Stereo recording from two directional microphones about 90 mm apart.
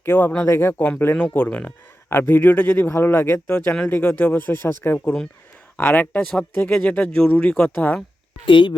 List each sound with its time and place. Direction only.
0.0 s a man's voice: 20° left (ahead or behind)
8.4 s speech: 60° left (ahead or behind)